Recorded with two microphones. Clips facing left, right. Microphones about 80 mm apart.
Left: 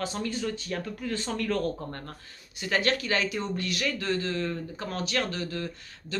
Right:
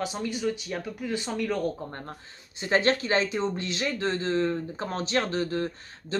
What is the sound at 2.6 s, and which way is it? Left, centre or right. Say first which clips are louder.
Speech: right 3 dB; right.